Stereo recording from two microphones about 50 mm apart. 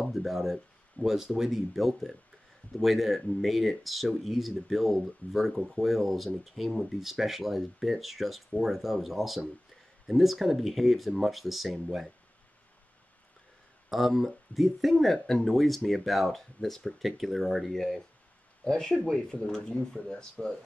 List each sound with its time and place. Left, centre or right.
0.1 s speech: centre
13.8 s speech: centre